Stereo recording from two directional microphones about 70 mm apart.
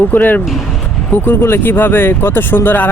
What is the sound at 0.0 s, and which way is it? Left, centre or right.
Speech, left.